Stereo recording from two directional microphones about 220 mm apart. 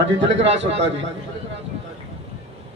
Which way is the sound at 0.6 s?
55° right (ahead or behind).